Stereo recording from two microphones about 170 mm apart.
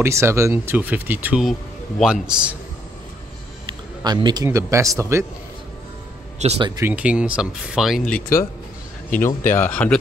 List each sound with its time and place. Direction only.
0.0 s a man's voice: 15° right (ahead or behind)
4.0 s a man's voice: 25° right (ahead or behind)
6.4 s speech: 40° right (ahead or behind)
6.8 s speech: 10° right (ahead or behind)
8.1 s speech: 15° left (ahead or behind)
9.5 s speech: 10° left (ahead or behind)